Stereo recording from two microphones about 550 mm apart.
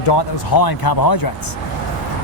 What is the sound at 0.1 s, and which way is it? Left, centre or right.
Speech, left.